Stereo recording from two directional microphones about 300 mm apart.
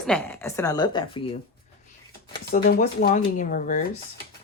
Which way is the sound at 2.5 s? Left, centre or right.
Left.